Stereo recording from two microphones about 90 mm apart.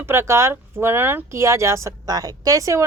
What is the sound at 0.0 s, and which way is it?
Speech, 30° right (ahead or behind).